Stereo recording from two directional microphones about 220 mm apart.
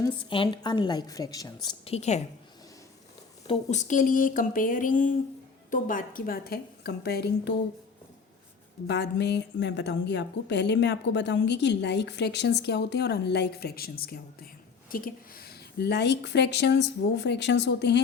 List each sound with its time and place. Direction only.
0.2 s a woman's voice: 25° left (ahead or behind)
1.6 s a woman's voice: 25° left (ahead or behind)
3.4 s a woman's voice: 30° left (ahead or behind); by 7.5 s 45° left (ahead or behind)
8.9 s a woman's voice: 50° left (ahead or behind)